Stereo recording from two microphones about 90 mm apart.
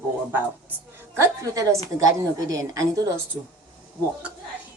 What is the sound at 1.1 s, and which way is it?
A woman's voice, 35° right (ahead or behind).